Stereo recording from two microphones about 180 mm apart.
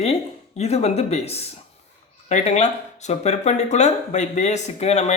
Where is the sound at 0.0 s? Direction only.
35° left (ahead or behind).